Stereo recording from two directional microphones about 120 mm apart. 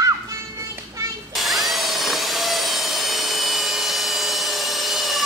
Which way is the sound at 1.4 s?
Centre (ahead or behind).